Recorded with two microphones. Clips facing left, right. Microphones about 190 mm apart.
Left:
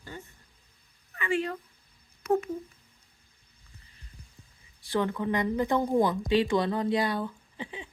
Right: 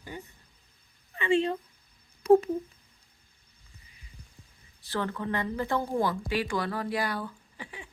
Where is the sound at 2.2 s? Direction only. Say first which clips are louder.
Right 7 dB; 35° right (ahead or behind).